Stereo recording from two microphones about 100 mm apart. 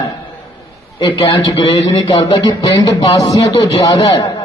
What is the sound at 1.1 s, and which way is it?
Speech, 55° left (ahead or behind).